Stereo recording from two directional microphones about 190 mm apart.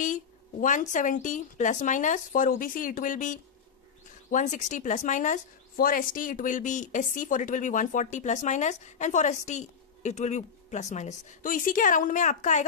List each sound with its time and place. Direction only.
0.0 s a woman's voice: 40° left (ahead or behind)